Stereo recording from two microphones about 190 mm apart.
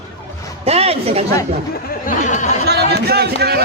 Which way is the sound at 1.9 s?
45° left (ahead or behind).